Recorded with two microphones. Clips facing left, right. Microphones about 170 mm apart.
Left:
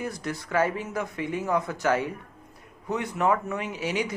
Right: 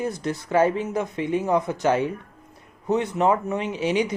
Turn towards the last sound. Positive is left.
turn(degrees=-20)  # may be behind; listen again after turning